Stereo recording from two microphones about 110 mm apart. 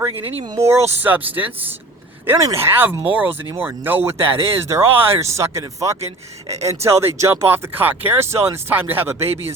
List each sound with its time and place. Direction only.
0.6 s speech: 20° right (ahead or behind)
2.4 s speech: 25° right (ahead or behind)